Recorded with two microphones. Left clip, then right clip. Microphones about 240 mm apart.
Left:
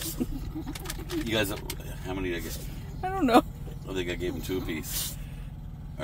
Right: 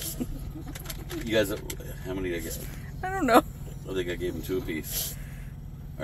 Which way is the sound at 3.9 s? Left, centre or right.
Left.